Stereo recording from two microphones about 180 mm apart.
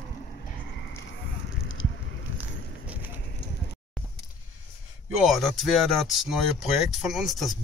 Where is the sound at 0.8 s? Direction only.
75° left (ahead or behind).